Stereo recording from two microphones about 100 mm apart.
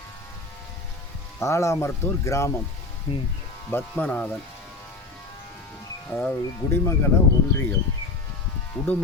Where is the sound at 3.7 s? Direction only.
20° left (ahead or behind).